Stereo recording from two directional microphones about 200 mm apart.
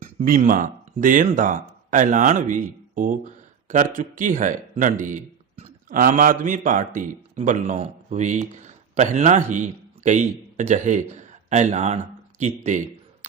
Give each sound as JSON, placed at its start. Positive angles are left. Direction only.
{"t": 0.0, "sound": "speech", "side_deg": -40}